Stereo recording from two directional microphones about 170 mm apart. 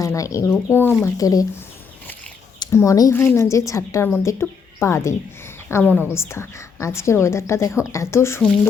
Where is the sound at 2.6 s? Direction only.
20° left (ahead or behind).